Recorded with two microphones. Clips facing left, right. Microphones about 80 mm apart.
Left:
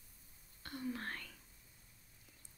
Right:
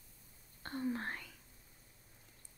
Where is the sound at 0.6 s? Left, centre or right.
Right.